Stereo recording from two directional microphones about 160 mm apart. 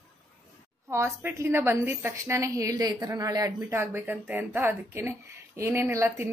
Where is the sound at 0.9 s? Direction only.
15° right (ahead or behind).